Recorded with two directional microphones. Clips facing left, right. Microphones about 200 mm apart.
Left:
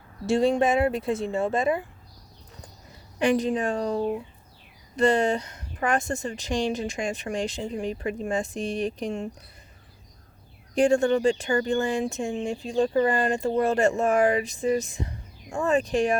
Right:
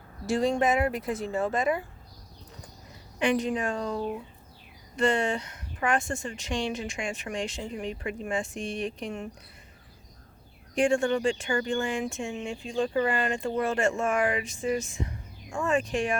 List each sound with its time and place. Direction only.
0.3 s speech: 25° left (ahead or behind)
3.2 s speech: 40° left (ahead or behind)
10.8 s speech: 35° left (ahead or behind)